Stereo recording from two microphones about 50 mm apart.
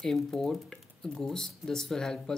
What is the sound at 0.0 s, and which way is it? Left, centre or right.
Speech, centre.